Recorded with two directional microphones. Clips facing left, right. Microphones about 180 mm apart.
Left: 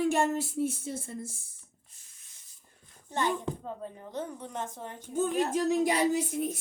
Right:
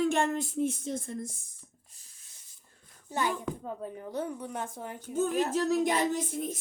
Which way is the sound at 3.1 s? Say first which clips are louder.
Left 1 dB; 10° right (ahead or behind).